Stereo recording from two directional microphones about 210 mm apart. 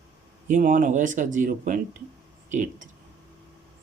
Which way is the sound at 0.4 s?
35° right (ahead or behind).